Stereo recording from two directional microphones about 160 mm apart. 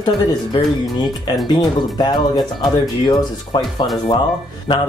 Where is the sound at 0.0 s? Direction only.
25° left (ahead or behind).